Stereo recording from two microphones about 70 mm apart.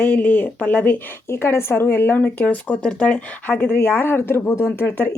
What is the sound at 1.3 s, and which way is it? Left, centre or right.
Speech, left.